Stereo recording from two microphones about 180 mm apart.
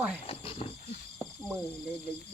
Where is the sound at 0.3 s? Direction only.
30° left (ahead or behind).